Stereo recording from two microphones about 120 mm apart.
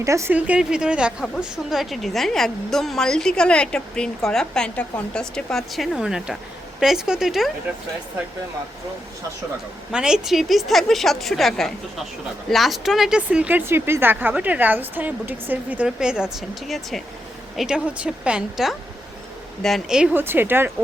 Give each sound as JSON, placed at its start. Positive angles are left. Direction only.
{"t": 0.0, "sound": "speech", "side_deg": -25}
{"t": 0.3, "sound": "a woman's voice", "side_deg": -10}
{"t": 9.9, "sound": "a woman's voice", "side_deg": -5}
{"t": 20.1, "sound": "speech", "side_deg": -15}